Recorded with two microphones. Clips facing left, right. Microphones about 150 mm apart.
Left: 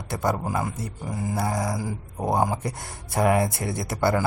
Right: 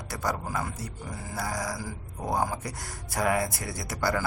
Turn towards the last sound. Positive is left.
turn(degrees=25)  # may be behind; listen again after turning